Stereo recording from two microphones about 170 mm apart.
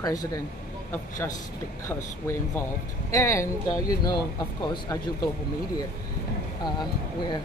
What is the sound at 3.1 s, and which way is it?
Speech, 15° left (ahead or behind).